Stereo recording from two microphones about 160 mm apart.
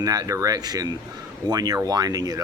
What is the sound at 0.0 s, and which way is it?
Speech, 20° right (ahead or behind).